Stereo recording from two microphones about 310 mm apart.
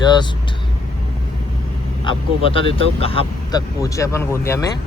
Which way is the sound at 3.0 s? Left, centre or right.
Centre.